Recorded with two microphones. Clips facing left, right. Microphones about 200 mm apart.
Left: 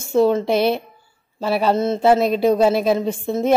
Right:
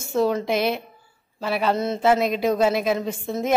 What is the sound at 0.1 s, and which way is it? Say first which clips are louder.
A woman's voice: left 5 dB; 30° left (ahead or behind).